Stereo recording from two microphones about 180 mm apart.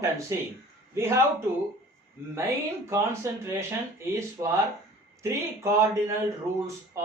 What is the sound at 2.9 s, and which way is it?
Speech, 15° right (ahead or behind).